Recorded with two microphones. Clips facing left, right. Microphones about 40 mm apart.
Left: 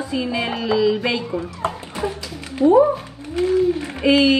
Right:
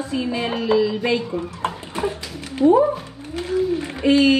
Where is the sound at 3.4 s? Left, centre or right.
Left.